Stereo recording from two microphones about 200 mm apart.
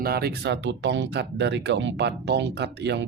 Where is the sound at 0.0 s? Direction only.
50° right (ahead or behind).